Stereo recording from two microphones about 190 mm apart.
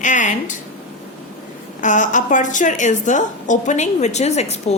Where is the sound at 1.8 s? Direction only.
40° left (ahead or behind).